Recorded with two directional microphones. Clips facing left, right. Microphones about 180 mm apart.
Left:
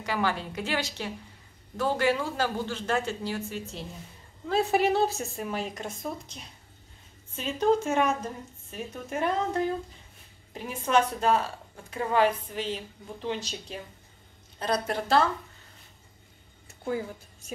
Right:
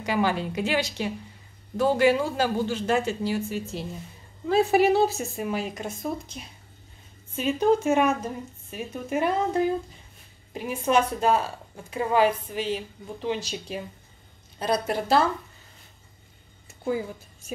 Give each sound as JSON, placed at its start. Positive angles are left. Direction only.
{"t": 0.0, "sound": "speech", "side_deg": -15}
{"t": 16.8, "sound": "speech", "side_deg": -5}